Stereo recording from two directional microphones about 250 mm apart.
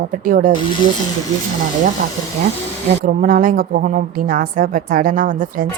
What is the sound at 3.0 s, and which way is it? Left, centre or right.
Speech, right.